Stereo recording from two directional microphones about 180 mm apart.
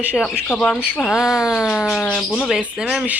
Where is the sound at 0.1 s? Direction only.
10° left (ahead or behind).